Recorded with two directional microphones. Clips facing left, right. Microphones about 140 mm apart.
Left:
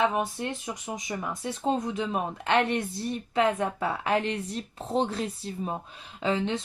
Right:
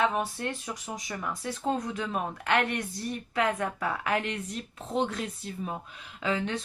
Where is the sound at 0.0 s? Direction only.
20° left (ahead or behind).